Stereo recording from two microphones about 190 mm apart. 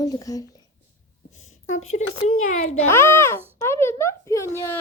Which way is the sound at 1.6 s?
40° left (ahead or behind).